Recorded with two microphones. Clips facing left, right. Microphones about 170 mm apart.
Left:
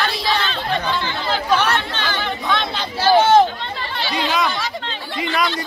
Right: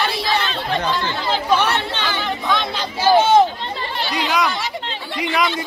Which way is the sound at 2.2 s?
5° right (ahead or behind).